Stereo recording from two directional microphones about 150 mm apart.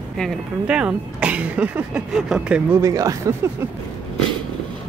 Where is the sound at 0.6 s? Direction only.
10° right (ahead or behind).